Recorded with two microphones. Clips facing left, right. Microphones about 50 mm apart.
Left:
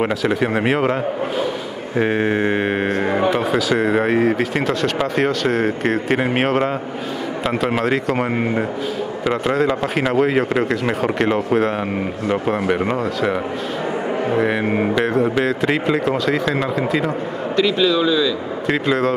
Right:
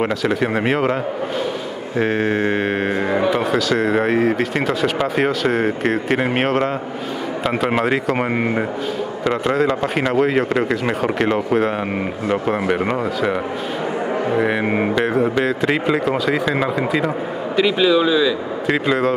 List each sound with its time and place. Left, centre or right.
0.0 s speech: centre
2.0 s speech: centre
14.6 s speech: centre
15.0 s speech: centre